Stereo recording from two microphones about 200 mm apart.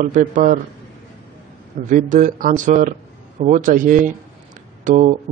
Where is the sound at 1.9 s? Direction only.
40° right (ahead or behind).